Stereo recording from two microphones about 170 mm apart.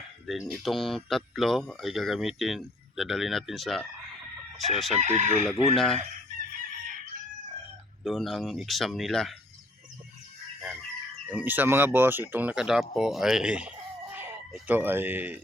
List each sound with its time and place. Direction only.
0.3 s speech: centre (ahead or behind)
4.9 s chicken: 40° right (ahead or behind)
5.7 s speech: centre (ahead or behind)
8.0 s speech: centre (ahead or behind)
11.3 s speech: 10° right (ahead or behind)